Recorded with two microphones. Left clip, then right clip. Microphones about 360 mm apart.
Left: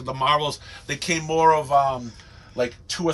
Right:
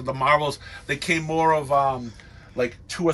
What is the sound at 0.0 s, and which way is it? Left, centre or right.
A man's voice, centre.